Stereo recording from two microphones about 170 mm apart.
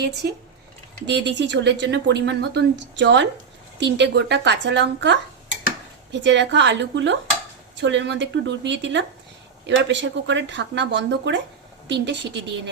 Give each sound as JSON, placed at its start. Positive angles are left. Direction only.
{"t": 0.2, "sound": "speech", "side_deg": -70}
{"t": 1.0, "sound": "speech", "side_deg": -90}